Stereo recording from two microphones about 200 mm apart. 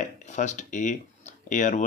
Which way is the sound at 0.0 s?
35° left (ahead or behind).